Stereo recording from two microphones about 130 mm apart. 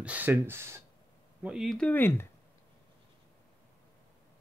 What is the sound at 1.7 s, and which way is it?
Speech, 15° left (ahead or behind).